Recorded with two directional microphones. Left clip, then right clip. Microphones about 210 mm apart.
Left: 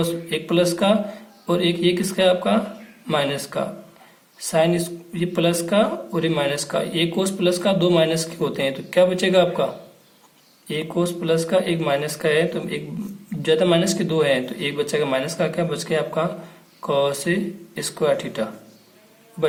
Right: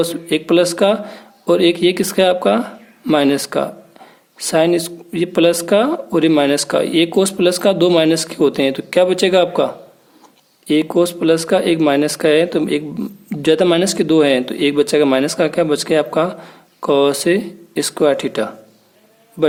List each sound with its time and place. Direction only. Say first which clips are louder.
0.0 s speech: right 6 dB; 45° right (ahead or behind)
10.7 s speech: right 9 dB; 45° right (ahead or behind)